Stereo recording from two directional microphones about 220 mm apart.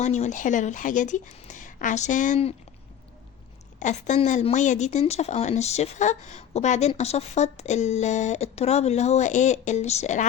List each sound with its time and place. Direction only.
0.0 s speech: 30° left (ahead or behind)
3.8 s speech: 35° left (ahead or behind)